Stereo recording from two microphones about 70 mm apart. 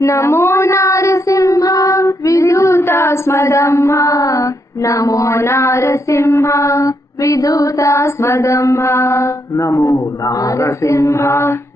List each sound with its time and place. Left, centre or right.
0.0 s child singing: left